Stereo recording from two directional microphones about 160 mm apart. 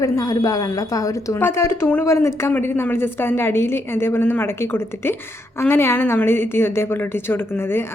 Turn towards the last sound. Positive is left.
turn(degrees=15)  # may be behind; listen again after turning